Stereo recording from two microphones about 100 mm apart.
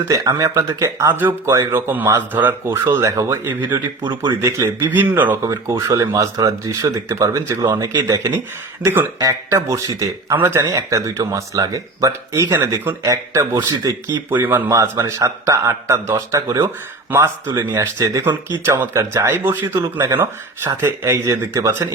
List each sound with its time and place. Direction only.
0.0 s speech: 35° right (ahead or behind); by 5.4 s 20° right (ahead or behind)
5.4 s speech: 30° right (ahead or behind)
7.6 s speech: 45° right (ahead or behind)
8.0 s speech: 30° right (ahead or behind)
10.6 s speech: 35° right (ahead or behind)
14.3 s speech: 20° right (ahead or behind)
15.0 s speech: 30° right (ahead or behind)
17.1 s speech: 25° right (ahead or behind)
17.7 s speech: 40° right (ahead or behind)
18.6 s speech: 25° right (ahead or behind)